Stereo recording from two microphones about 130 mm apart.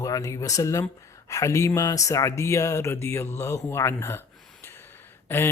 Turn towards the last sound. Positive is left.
turn(degrees=15)  # may be behind; listen again after turning